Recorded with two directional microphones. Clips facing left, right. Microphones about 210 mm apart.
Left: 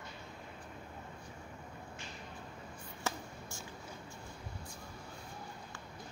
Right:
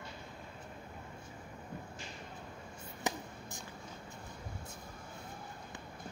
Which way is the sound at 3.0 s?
15° right (ahead or behind).